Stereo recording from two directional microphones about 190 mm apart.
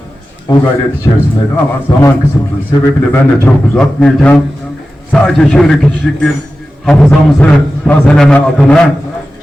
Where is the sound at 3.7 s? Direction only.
5° left (ahead or behind).